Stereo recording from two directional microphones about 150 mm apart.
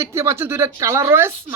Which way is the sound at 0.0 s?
15° right (ahead or behind).